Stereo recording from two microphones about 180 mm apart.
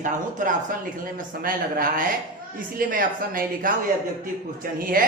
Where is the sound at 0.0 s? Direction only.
45° right (ahead or behind).